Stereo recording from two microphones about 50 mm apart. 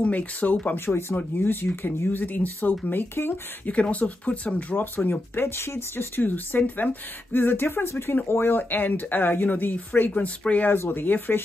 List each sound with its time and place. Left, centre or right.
0.0 s speech: left
0.7 s speech: left
1.1 s speech: left
2.9 s speech: left
3.6 s speech: left
4.7 s speech: left
6.2 s speech: left
10.1 s speech: left
10.9 s speech: left